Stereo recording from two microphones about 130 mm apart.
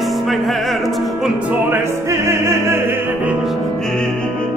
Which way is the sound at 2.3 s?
20° right (ahead or behind).